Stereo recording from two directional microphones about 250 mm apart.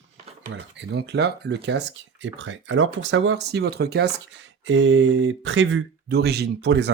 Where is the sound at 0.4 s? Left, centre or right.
Right.